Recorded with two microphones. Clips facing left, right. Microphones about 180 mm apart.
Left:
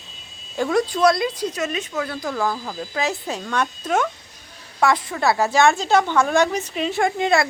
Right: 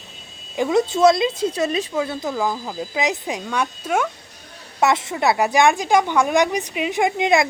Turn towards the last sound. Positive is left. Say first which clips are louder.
# right 1 dB
turn(degrees=-15)  # may be behind; listen again after turning